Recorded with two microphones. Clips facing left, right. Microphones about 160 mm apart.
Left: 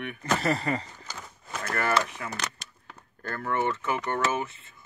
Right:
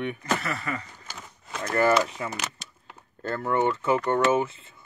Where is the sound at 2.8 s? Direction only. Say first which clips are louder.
Right 5 dB; 25° right (ahead or behind).